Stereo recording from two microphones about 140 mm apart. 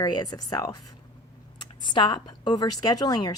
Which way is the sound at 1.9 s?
35° left (ahead or behind).